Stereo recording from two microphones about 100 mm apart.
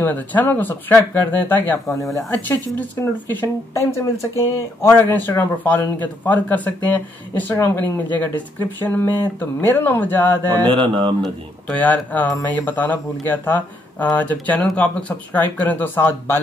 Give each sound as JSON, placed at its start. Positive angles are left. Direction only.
{"t": 0.0, "sound": "speech", "side_deg": 15}
{"t": 10.7, "sound": "speech", "side_deg": -60}
{"t": 11.7, "sound": "speech", "side_deg": 15}